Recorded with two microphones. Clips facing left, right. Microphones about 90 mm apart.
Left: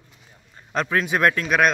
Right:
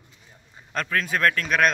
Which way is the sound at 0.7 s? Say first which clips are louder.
Left 3 dB; 15° left (ahead or behind).